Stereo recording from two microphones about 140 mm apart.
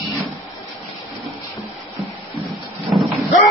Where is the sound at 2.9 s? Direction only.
Centre (ahead or behind).